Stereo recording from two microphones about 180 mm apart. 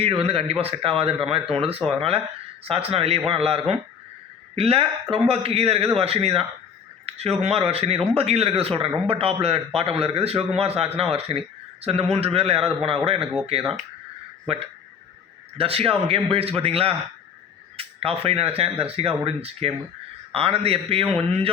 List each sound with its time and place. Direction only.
0.0 s speech: 35° right (ahead or behind)
13.1 s speech: 5° right (ahead or behind)
15.5 s speech: 30° right (ahead or behind)